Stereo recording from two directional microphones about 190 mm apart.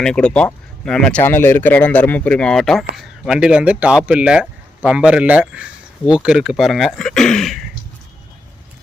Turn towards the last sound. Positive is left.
turn(degrees=5)  # may be behind; listen again after turning